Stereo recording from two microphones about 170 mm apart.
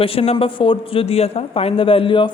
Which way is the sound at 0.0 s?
35° left (ahead or behind).